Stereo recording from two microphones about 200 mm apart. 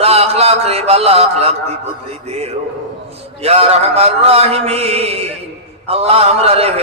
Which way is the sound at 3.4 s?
30° right (ahead or behind).